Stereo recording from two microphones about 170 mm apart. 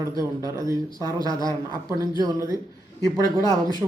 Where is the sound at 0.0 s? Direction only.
20° right (ahead or behind).